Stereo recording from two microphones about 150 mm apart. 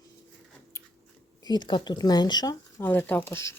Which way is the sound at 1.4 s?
30° left (ahead or behind).